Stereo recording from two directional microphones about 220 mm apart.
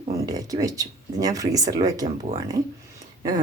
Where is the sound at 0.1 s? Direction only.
15° right (ahead or behind).